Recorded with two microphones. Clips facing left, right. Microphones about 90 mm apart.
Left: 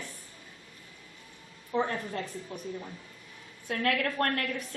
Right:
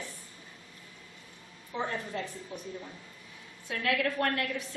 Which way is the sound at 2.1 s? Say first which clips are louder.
Even; 50° left (ahead or behind).